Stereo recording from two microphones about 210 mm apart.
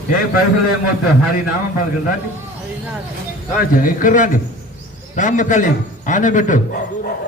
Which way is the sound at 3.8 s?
40° left (ahead or behind).